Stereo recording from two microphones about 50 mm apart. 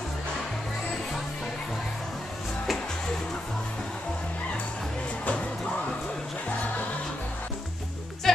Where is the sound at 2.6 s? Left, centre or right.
Centre.